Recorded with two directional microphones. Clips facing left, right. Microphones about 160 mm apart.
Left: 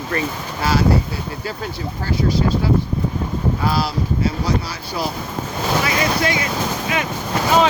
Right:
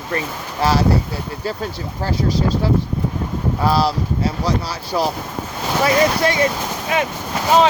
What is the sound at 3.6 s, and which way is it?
Speech, 35° right (ahead or behind).